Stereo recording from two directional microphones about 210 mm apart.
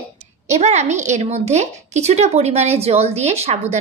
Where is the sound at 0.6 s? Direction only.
30° right (ahead or behind).